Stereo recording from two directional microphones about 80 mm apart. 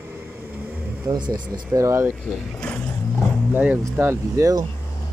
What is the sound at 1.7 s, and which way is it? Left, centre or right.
Speech, right.